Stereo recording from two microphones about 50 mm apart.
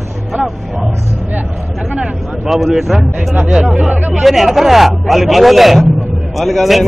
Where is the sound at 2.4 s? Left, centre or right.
Centre.